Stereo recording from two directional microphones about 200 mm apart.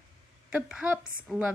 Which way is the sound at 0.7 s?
5° right (ahead or behind).